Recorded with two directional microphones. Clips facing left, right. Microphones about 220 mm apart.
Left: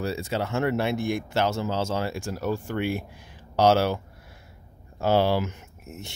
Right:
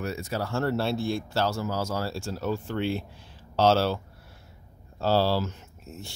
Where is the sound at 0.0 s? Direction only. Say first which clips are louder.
Left 3 dB; 30° left (ahead or behind).